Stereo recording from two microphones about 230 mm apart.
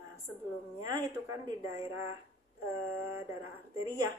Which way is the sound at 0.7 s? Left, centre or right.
Centre.